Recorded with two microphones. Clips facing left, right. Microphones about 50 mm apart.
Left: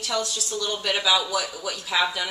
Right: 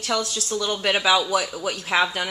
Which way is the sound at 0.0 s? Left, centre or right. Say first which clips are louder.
Right 2 dB; right.